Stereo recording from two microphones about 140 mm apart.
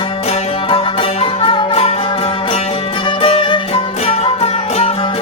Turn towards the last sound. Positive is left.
turn(degrees=45)  # may be behind; listen again after turning